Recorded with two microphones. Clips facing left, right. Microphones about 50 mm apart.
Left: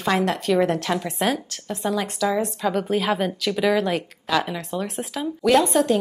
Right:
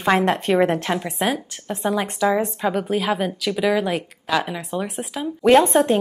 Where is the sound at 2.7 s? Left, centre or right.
Centre.